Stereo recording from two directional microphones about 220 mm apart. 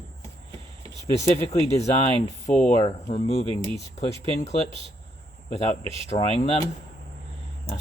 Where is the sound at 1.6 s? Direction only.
30° left (ahead or behind).